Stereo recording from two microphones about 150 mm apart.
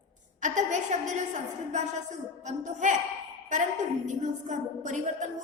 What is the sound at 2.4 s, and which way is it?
Speech, 55° right (ahead or behind).